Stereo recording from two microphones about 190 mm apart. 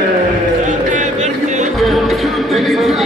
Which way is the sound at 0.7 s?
40° right (ahead or behind).